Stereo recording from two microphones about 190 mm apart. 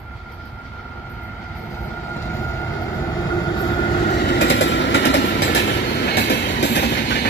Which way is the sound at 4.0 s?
55° left (ahead or behind).